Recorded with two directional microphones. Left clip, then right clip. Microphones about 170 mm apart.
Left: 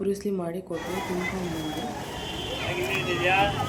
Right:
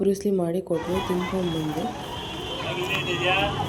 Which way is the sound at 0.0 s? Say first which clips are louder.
Right 5 dB; 20° right (ahead or behind).